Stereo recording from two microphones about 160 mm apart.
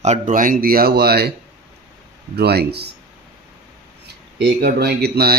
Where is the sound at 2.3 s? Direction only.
90° right.